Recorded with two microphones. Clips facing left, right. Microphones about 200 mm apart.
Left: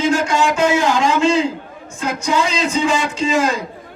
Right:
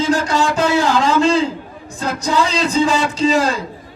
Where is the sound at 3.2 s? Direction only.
35° right (ahead or behind).